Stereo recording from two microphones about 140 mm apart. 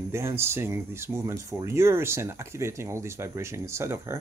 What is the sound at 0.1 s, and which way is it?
Speech, 20° right (ahead or behind).